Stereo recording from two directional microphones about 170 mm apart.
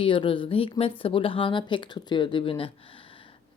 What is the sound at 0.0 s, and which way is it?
Speech, 30° left (ahead or behind).